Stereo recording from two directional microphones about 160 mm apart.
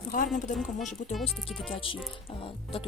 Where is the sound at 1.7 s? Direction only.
35° left (ahead or behind).